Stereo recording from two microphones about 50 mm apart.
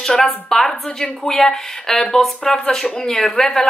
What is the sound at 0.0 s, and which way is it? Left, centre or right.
A woman's voice, centre.